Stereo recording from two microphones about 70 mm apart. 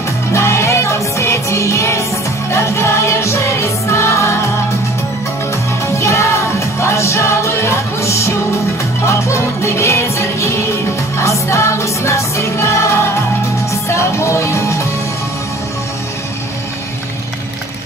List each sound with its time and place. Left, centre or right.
0.3 s music: left
5.9 s music: left